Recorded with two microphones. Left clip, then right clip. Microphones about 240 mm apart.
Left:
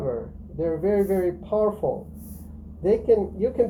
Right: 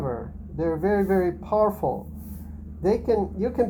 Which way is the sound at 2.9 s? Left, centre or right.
Right.